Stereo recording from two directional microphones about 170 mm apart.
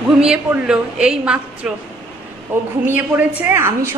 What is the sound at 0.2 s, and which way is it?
A woman's voice, 5° right (ahead or behind).